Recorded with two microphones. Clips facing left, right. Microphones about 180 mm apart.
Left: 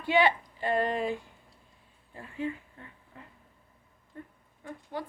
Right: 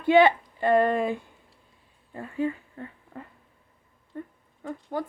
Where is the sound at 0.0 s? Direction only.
50° right (ahead or behind).